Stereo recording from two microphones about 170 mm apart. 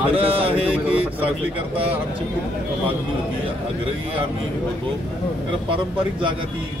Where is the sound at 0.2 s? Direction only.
35° right (ahead or behind).